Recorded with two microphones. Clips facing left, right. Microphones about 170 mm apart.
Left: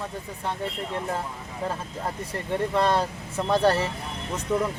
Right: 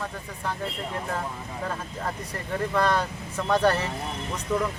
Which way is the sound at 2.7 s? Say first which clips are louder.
Even; 25° left (ahead or behind).